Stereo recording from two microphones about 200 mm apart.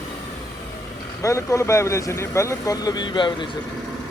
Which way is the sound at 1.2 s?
15° left (ahead or behind).